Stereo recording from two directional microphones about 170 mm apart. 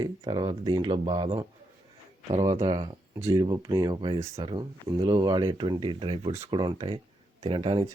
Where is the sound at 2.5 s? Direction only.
20° right (ahead or behind).